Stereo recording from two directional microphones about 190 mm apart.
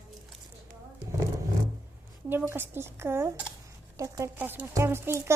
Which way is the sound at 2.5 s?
10° right (ahead or behind).